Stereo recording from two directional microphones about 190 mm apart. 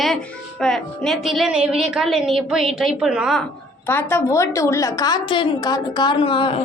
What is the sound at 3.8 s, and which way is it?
A woman's voice, 10° left (ahead or behind).